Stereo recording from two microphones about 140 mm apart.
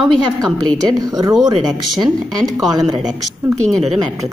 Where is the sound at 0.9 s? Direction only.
25° right (ahead or behind).